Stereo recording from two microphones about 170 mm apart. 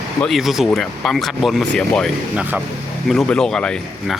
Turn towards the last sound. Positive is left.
turn(degrees=5)  # may be behind; listen again after turning